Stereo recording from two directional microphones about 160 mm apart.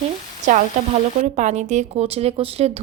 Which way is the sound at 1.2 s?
50° right (ahead or behind).